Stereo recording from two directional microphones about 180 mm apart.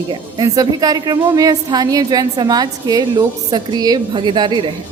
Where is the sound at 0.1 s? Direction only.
20° right (ahead or behind).